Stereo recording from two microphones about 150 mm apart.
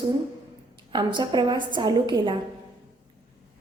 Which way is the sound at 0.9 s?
30° right (ahead or behind).